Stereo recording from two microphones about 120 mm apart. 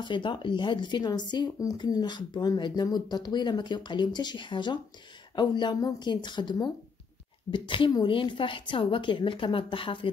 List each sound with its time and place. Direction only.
0.0 s a woman's voice: 40° left (ahead or behind)